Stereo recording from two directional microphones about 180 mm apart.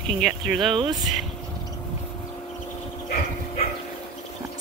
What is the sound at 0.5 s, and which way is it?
Speech, 25° right (ahead or behind).